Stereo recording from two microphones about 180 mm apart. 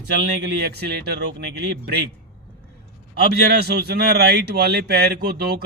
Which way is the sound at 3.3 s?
65° right (ahead or behind).